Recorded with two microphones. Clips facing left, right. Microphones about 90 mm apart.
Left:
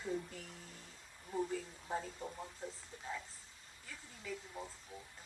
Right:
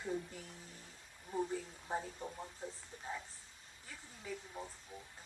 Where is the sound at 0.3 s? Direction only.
30° right (ahead or behind).